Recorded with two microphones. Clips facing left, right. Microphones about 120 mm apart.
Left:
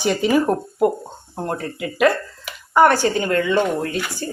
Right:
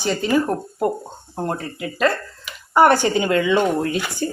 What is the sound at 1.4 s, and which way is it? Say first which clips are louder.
Speech: even; centre (ahead or behind).